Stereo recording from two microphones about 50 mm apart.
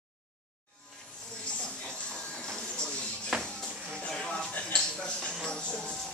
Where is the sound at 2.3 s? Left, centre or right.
Centre.